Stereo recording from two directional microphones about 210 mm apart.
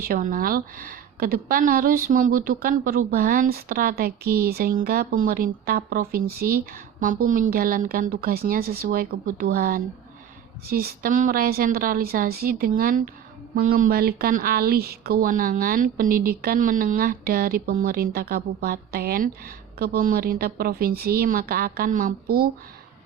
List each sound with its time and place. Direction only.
0.0 s speech: 40° right (ahead or behind)